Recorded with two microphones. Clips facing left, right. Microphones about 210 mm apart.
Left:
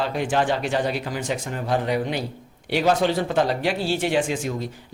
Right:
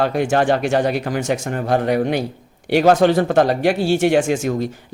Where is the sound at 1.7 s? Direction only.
55° right (ahead or behind).